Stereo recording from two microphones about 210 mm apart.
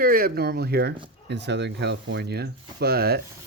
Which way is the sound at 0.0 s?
45° right (ahead or behind).